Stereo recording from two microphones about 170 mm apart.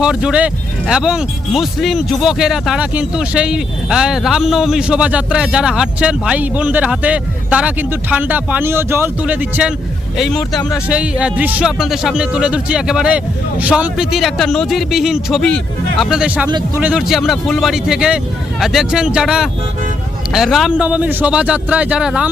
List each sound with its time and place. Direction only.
0.0 s speech: 5° right (ahead or behind)
16.5 s speech: 25° right (ahead or behind)
16.8 s a man's voice: 5° right (ahead or behind)